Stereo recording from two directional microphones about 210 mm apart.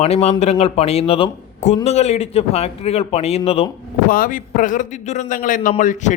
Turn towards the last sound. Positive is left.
turn(degrees=35)  # may be behind; listen again after turning